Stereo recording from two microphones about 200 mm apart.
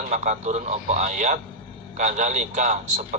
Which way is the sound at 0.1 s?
35° right (ahead or behind).